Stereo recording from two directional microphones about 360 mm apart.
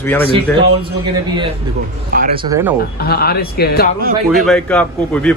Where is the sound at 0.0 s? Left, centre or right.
Centre.